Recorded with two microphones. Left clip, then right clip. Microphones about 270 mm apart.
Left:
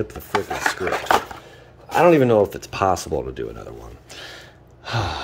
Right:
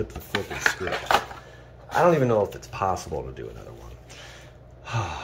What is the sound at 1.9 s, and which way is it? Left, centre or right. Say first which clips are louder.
Speech: left 5 dB; left.